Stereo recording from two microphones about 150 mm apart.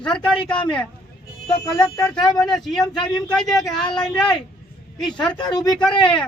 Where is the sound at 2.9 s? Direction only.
30° left (ahead or behind).